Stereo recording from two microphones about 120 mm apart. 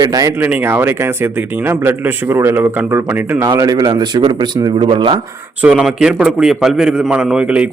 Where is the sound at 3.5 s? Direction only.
35° right (ahead or behind).